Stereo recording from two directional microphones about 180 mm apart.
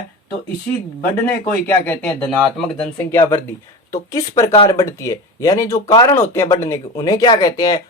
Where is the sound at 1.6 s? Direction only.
10° left (ahead or behind).